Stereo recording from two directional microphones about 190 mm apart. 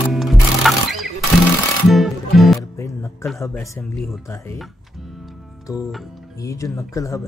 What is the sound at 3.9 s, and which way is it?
Speech, centre (ahead or behind).